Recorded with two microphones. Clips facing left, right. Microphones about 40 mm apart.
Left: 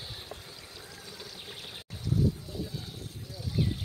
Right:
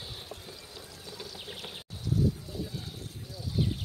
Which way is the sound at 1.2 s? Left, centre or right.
Right.